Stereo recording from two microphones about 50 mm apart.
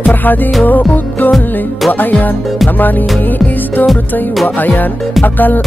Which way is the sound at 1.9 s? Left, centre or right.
Left.